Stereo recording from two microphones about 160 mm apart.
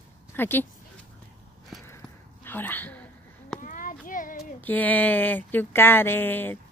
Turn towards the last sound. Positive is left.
turn(degrees=10)  # may be behind; listen again after turning